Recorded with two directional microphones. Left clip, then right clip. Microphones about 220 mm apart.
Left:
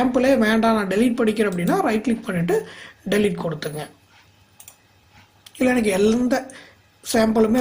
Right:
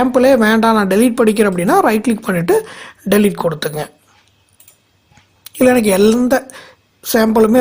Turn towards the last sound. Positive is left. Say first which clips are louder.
# right 7 dB
turn(degrees=-45)  # may be behind; listen again after turning